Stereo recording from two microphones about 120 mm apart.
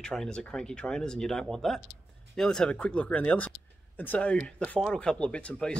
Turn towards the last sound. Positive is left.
turn(degrees=10)  # may be behind; listen again after turning